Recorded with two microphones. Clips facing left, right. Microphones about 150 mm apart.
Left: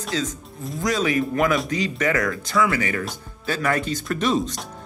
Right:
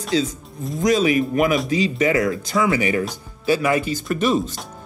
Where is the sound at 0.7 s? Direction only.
15° right (ahead or behind).